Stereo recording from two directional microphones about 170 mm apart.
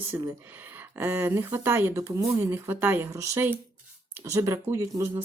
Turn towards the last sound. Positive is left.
turn(degrees=-15)  # may be behind; listen again after turning